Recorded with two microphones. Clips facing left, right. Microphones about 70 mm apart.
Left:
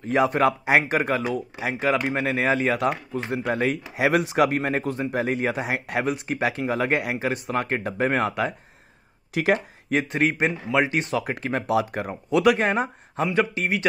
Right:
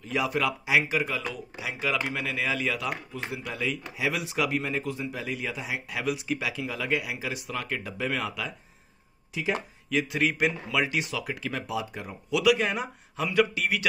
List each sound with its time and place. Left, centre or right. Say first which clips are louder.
0.0 s speech: left 7 dB; left
6.0 s speech: left 5 dB; left
9.3 s speech: left 8 dB; left
9.8 s a man's voice: left 4 dB; left
11.6 s a man's voice: left 9 dB; left